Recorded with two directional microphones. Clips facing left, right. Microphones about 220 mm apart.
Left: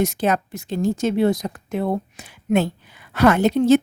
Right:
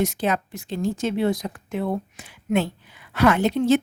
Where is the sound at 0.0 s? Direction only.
45° left (ahead or behind).